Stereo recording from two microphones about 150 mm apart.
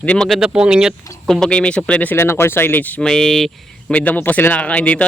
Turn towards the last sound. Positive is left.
turn(degrees=10)  # may be behind; listen again after turning